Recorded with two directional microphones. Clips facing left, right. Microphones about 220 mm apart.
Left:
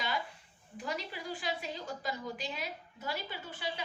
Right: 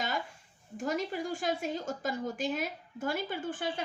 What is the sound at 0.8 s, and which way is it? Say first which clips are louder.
A woman's voice: right 7 dB; 45° right (ahead or behind).